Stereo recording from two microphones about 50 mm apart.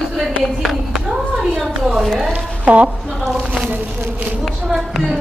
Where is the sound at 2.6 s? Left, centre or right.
Right.